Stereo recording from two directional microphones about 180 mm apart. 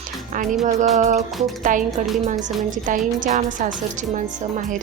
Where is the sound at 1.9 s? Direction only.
Centre (ahead or behind).